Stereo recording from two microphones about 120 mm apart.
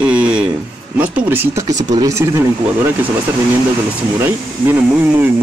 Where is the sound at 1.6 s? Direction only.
30° right (ahead or behind).